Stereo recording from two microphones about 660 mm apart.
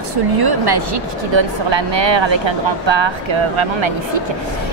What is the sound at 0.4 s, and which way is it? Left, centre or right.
Speech, right.